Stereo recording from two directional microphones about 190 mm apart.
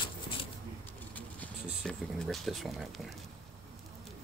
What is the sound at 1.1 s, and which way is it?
Speech, 5° left (ahead or behind).